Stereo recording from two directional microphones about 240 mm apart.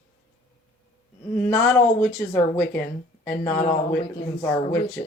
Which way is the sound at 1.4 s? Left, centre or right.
Centre.